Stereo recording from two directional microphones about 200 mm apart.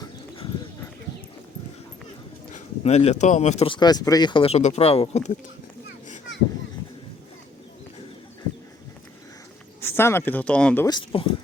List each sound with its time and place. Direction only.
2.5 s speech: 35° left (ahead or behind)
9.8 s speech: 10° left (ahead or behind)
10.8 s speech: 25° left (ahead or behind)